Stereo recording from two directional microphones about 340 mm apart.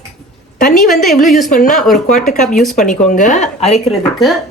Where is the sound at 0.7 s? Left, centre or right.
Centre.